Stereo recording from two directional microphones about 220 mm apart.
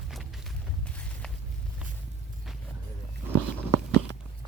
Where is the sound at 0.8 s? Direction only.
5° left (ahead or behind).